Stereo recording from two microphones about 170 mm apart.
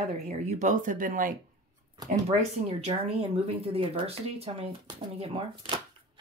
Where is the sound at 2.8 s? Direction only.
35° right (ahead or behind).